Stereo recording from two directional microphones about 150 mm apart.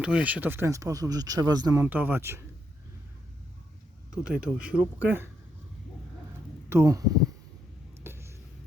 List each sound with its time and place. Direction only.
0.0 s speech: 10° right (ahead or behind)
4.1 s speech: 5° right (ahead or behind)
6.7 s speech: 20° right (ahead or behind)
8.0 s a sound: 20° right (ahead or behind)